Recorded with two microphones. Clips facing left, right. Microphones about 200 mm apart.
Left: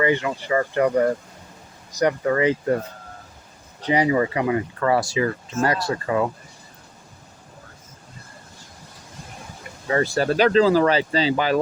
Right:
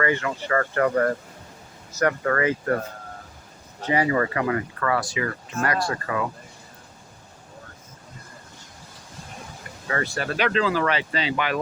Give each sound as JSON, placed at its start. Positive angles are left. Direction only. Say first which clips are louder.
{"t": 0.0, "sound": "speech", "louder": "left 3 dB", "side_deg": 20}
{"t": 3.8, "sound": "speech", "louder": "left 3 dB", "side_deg": 15}
{"t": 9.8, "sound": "speech", "louder": "left 7 dB", "side_deg": 30}